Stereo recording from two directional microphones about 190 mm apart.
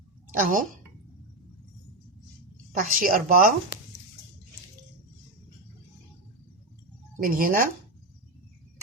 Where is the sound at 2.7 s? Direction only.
45° right (ahead or behind).